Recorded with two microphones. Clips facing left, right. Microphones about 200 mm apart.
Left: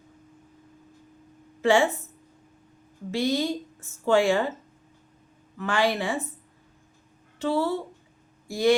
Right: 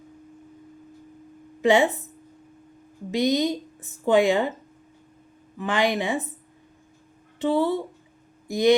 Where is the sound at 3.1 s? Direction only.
15° right (ahead or behind).